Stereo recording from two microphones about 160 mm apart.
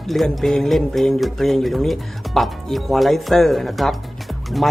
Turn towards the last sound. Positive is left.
turn(degrees=0)  # may be behind; listen again after turning